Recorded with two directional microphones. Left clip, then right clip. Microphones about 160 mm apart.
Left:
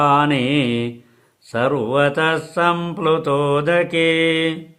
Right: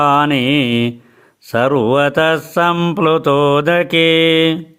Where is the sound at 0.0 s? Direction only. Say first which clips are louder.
Right 3 dB; 35° right (ahead or behind).